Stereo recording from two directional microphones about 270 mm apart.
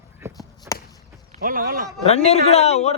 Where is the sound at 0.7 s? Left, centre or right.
Centre.